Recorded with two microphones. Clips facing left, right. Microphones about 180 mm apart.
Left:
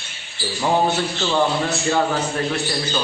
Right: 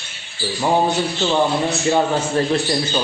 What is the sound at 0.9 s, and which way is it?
Speech, 20° right (ahead or behind).